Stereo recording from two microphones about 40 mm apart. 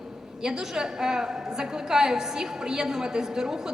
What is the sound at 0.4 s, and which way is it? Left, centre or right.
A woman's voice, centre.